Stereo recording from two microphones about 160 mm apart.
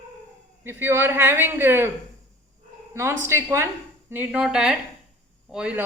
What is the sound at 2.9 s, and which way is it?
Speech, 15° right (ahead or behind).